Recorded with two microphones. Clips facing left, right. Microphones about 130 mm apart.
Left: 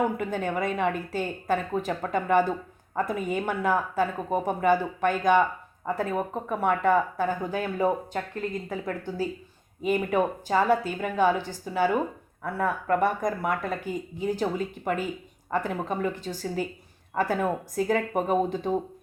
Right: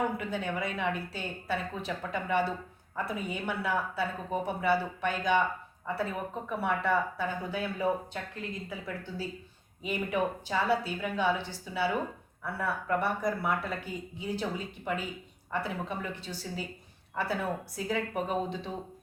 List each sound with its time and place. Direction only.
0.2 s speech: 45° left (ahead or behind)